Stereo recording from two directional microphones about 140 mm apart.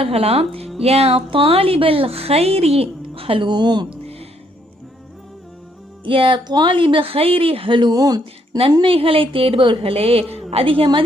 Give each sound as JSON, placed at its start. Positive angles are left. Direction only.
{"t": 0.0, "sound": "speech", "side_deg": -45}
{"t": 6.1, "sound": "speech", "side_deg": -40}
{"t": 8.2, "sound": "speech", "side_deg": -40}